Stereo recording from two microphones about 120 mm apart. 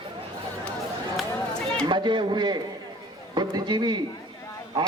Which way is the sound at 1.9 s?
40° right (ahead or behind).